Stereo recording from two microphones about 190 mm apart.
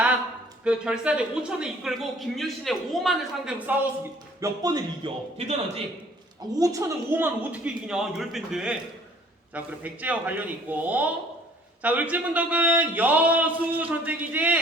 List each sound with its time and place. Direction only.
0.6 s speech: 5° right (ahead or behind)
4.4 s a man's voice: 20° right (ahead or behind)
6.6 s a man's voice: 15° right (ahead or behind)